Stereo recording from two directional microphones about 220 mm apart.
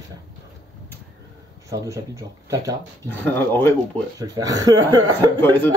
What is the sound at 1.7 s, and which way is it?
Speech, 15° right (ahead or behind).